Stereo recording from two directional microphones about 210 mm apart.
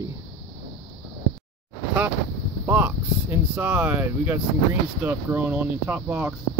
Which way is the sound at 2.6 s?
10° right (ahead or behind).